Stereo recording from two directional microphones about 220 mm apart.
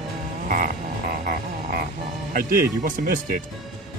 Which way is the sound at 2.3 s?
40° right (ahead or behind).